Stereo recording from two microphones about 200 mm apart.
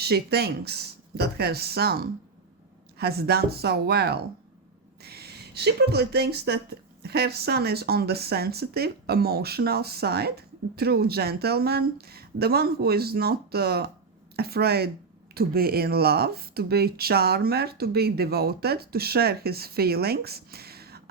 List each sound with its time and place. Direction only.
0.0 s speech: 55° right (ahead or behind)